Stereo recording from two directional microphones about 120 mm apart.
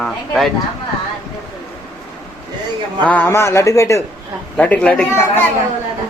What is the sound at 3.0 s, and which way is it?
A man's voice, 15° left (ahead or behind).